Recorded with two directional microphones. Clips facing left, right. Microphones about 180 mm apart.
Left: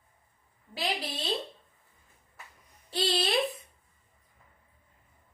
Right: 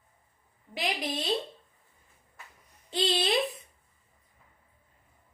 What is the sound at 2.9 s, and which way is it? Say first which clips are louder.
Speech: right 1 dB; 15° right (ahead or behind).